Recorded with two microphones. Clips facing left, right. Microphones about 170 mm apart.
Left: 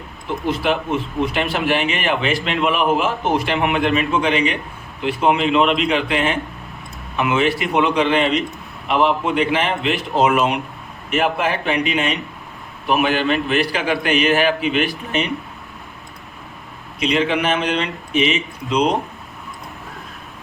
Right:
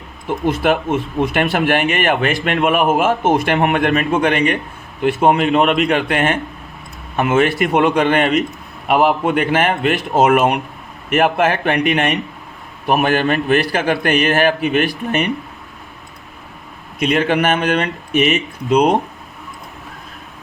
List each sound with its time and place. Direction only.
0.6 s a man's voice: 50° right (ahead or behind)
17.0 s speech: 50° right (ahead or behind)